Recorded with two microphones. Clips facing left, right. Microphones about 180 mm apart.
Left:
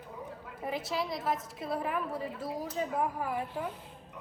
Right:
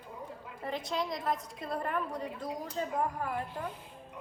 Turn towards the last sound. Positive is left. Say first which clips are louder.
# left 2 dB
turn(degrees=10)  # may be behind; listen again after turning